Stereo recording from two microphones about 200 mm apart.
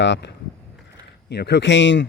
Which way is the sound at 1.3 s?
55° left (ahead or behind).